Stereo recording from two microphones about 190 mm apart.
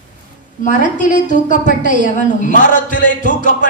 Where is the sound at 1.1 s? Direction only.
40° left (ahead or behind).